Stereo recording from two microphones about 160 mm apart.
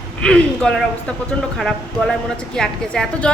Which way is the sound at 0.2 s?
5° left (ahead or behind).